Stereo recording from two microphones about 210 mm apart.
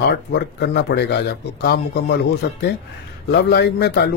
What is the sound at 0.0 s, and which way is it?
Speech, 50° left (ahead or behind).